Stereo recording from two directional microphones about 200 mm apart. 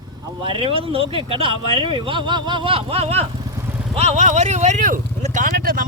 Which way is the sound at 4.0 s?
35° right (ahead or behind).